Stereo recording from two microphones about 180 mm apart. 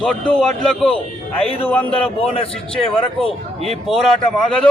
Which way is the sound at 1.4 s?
30° left (ahead or behind).